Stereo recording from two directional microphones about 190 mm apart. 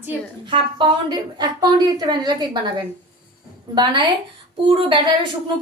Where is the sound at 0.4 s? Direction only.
25° right (ahead or behind).